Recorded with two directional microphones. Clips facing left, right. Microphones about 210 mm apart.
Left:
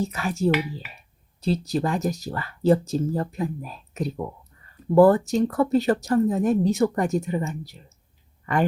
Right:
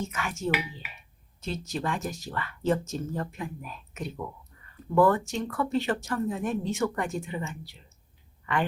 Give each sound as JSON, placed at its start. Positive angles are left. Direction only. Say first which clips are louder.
{"t": 0.0, "sound": "speech", "louder": "left 8 dB", "side_deg": 35}